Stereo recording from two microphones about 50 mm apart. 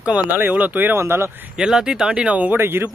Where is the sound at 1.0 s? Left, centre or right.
Right.